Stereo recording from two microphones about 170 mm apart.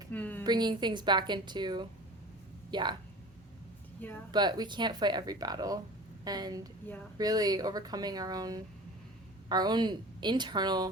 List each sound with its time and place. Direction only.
0.1 s a sound: 10° left (ahead or behind)
0.4 s speech: 25° right (ahead or behind)
4.3 s speech: 25° right (ahead or behind)
6.8 s speech: 10° left (ahead or behind)
7.2 s speech: 20° right (ahead or behind)